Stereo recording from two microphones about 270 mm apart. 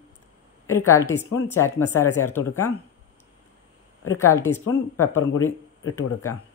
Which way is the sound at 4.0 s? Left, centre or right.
Left.